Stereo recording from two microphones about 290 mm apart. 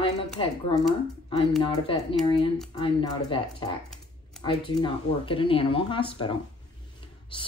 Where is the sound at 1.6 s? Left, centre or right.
Centre.